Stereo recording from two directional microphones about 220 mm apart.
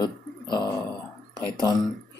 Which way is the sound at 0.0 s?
20° left (ahead or behind).